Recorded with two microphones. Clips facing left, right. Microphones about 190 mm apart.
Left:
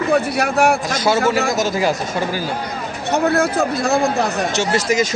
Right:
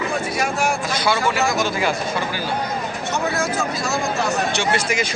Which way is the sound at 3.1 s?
60° left (ahead or behind).